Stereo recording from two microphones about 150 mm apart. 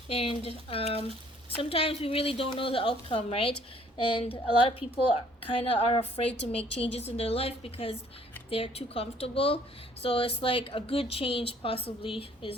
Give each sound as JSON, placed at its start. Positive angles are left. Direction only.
{"t": 0.1, "sound": "speech", "side_deg": 40}
{"t": 5.9, "sound": "speech", "side_deg": 40}